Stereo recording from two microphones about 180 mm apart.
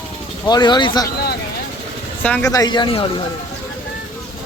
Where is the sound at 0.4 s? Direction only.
25° left (ahead or behind).